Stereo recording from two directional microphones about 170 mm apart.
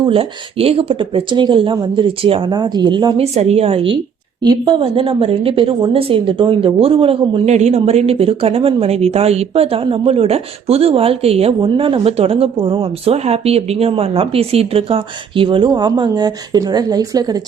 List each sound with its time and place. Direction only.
0.0 s speech: 35° right (ahead or behind)
3.3 s a woman's voice: 40° right (ahead or behind); by 17.4 s 20° right (ahead or behind)